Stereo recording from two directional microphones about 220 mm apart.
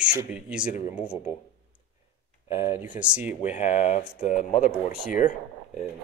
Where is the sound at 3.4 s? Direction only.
30° left (ahead or behind).